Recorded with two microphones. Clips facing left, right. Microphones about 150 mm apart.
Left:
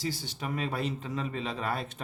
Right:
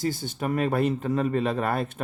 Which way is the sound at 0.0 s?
50° right (ahead or behind).